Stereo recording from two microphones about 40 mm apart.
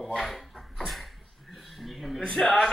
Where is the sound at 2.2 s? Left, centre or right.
Centre.